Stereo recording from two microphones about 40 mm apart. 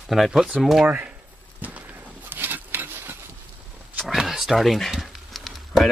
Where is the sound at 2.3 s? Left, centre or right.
Right.